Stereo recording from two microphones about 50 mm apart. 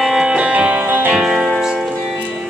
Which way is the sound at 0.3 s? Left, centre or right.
Right.